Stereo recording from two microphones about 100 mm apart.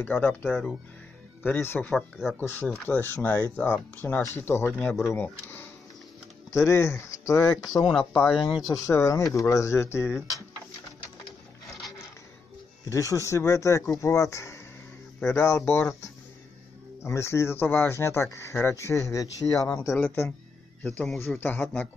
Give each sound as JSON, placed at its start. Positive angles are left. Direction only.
{"t": 0.0, "sound": "speech", "side_deg": 15}
{"t": 1.9, "sound": "speech", "side_deg": 0}
{"t": 2.3, "sound": "speech", "side_deg": 20}
{"t": 7.9, "sound": "speech", "side_deg": 5}
{"t": 8.6, "sound": "speech", "side_deg": 35}
{"t": 12.8, "sound": "speech", "side_deg": 35}
{"t": 15.1, "sound": "speech", "side_deg": 20}
{"t": 17.0, "sound": "speech", "side_deg": 25}
{"t": 21.2, "sound": "speech", "side_deg": 20}